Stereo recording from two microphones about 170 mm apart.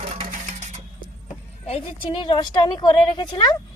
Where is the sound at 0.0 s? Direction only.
40° right (ahead or behind).